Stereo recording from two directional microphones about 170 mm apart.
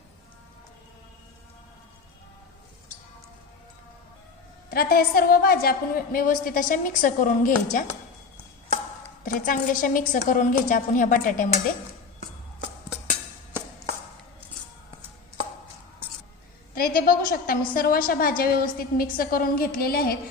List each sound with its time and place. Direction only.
4.7 s a woman's voice: 65° left (ahead or behind)
9.2 s a woman's voice: 55° left (ahead or behind)
16.7 s a woman's voice: 60° left (ahead or behind)